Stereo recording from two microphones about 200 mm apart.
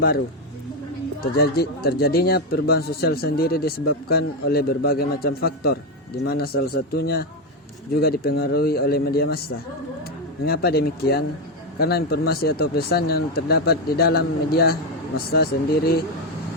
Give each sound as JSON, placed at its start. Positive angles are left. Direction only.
{"t": 1.2, "sound": "speech", "side_deg": 50}